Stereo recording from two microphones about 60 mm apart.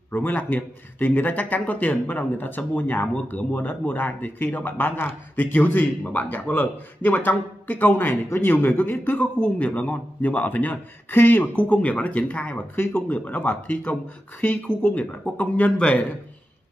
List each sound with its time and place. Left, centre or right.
0.1 s a man's voice: left
12.7 s a man's voice: left